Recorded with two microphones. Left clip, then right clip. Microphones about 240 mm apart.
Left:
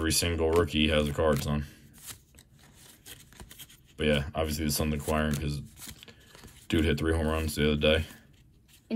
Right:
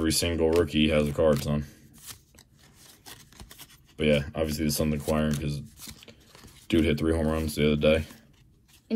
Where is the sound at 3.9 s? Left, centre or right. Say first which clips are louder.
Right 3 dB; centre.